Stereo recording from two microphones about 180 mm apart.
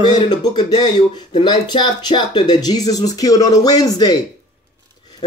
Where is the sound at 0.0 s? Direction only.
25° left (ahead or behind).